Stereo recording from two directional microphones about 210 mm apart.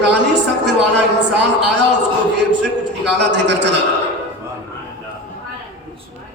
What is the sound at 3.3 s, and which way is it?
Speech, 55° right (ahead or behind).